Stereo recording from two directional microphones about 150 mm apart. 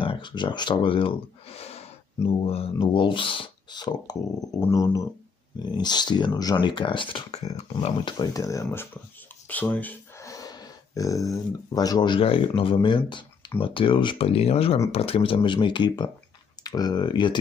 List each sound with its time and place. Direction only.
0.0 s speech: 35° left (ahead or behind)
8.0 s speech: 25° left (ahead or behind)
9.5 s a sound: 10° left (ahead or behind)
10.3 s speech: 25° left (ahead or behind)